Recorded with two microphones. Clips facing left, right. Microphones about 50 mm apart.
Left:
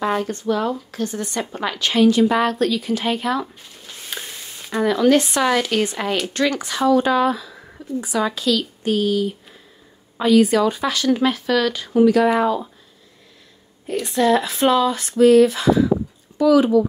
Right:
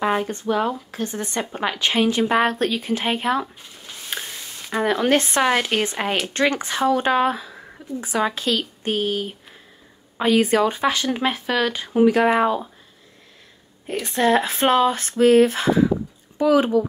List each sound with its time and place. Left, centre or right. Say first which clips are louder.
0.0 s speech: even; centre
4.1 s a sound: right 2 dB; right
4.7 s speech: left 3 dB; right
14.0 s speech: left 1 dB; right